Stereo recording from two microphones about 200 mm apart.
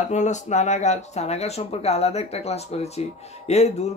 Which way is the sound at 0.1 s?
35° left (ahead or behind).